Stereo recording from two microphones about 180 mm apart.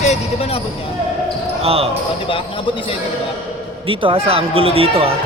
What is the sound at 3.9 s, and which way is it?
Speech, 30° right (ahead or behind).